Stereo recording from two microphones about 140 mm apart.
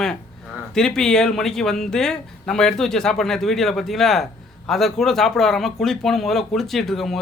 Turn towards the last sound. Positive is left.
turn(degrees=0)  # may be behind; listen again after turning